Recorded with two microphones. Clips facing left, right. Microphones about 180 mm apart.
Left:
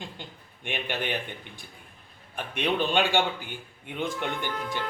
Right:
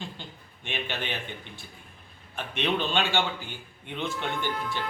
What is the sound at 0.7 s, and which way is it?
Speech, 15° left (ahead or behind).